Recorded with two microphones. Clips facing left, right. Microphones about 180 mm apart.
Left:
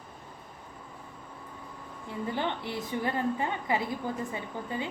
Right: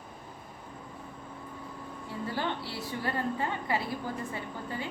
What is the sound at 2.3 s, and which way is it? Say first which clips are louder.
A woman's voice: left 2 dB; 20° left (ahead or behind).